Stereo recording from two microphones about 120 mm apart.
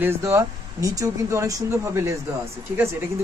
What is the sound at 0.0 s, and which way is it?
Speech, 20° right (ahead or behind).